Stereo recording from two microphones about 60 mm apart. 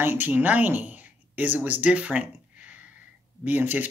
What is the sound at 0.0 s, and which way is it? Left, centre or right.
Speech, right.